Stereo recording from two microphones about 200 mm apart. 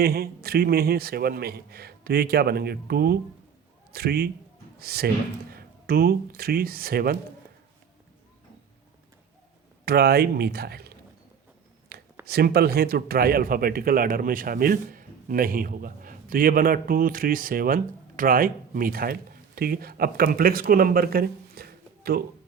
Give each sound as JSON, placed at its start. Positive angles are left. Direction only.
{"t": 0.0, "sound": "speech", "side_deg": -50}
{"t": 9.8, "sound": "speech", "side_deg": -50}
{"t": 12.2, "sound": "speech", "side_deg": -50}